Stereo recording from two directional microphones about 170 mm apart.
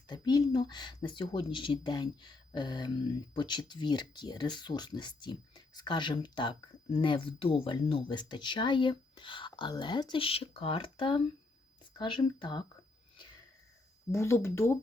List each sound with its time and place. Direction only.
0.1 s speech: 25° left (ahead or behind)
14.1 s speech: 15° left (ahead or behind)